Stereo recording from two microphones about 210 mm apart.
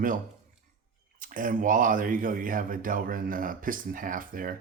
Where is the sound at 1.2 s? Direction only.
40° right (ahead or behind).